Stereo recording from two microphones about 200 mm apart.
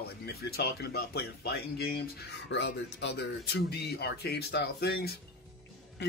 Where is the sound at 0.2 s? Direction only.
50° left (ahead or behind).